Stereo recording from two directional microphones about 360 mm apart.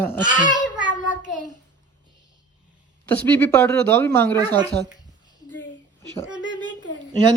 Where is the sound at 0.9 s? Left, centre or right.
Left.